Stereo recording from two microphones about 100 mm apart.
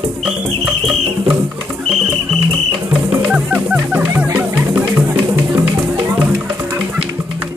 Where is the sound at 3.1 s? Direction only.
15° right (ahead or behind).